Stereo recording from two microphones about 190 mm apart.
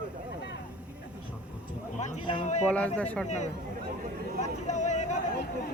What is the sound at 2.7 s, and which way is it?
Speech, 10° left (ahead or behind).